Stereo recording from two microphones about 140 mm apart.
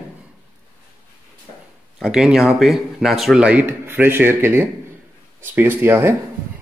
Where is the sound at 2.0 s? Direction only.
5° right (ahead or behind).